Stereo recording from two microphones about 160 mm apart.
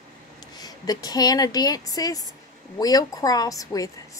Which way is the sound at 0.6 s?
25° left (ahead or behind).